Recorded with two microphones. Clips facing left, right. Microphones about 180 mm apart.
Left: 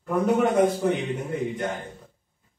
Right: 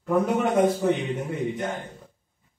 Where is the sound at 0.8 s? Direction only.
Centre (ahead or behind).